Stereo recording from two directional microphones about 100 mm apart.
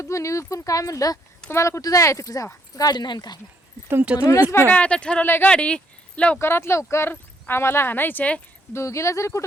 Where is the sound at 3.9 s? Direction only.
15° right (ahead or behind).